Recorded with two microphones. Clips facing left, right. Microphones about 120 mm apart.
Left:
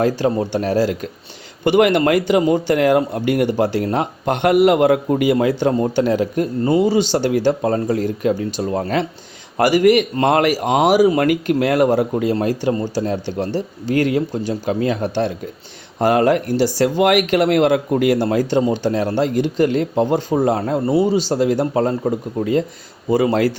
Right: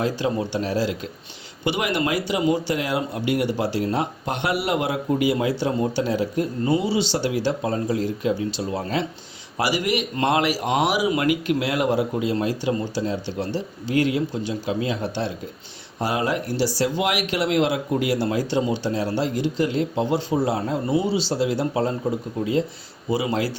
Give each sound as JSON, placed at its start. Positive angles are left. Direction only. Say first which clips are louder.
{"t": 0.0, "sound": "speech", "louder": "left 6 dB", "side_deg": 50}